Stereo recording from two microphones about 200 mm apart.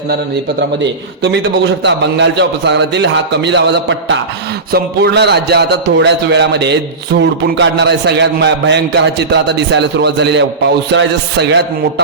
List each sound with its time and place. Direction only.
0.8 s a man's voice: 60° right (ahead or behind)